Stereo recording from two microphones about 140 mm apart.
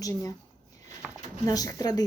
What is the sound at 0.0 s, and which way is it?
Speech, 25° left (ahead or behind).